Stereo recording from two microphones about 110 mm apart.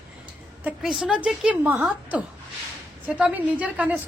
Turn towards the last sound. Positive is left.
turn(degrees=-15)  # may be behind; listen again after turning